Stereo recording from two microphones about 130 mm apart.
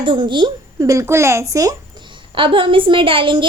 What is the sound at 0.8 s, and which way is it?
A woman's voice, 25° right (ahead or behind).